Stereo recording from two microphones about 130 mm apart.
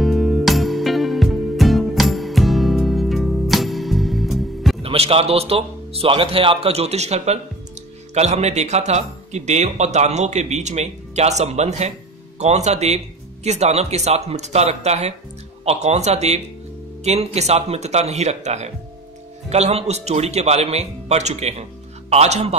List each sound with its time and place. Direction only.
0.0 s music: centre (ahead or behind)
4.8 s speech: 50° right (ahead or behind)